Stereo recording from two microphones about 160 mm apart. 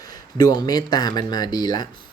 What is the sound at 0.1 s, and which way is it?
Speech, 25° left (ahead or behind).